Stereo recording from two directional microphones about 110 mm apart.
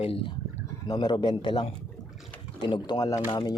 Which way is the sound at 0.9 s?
40° left (ahead or behind).